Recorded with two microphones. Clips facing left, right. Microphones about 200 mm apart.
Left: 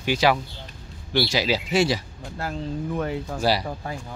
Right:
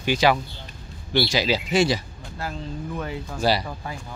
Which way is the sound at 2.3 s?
55° left (ahead or behind).